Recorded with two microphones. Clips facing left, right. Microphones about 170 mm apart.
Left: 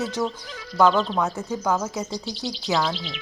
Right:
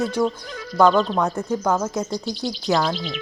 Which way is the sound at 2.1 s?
50° right (ahead or behind).